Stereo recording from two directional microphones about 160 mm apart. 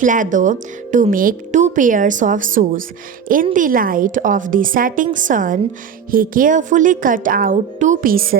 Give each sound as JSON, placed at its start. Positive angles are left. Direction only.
{"t": 0.0, "sound": "a woman's voice", "side_deg": -55}